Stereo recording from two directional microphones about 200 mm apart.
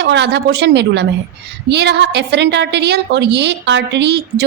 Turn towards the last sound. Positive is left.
turn(degrees=-60)  # may be behind; listen again after turning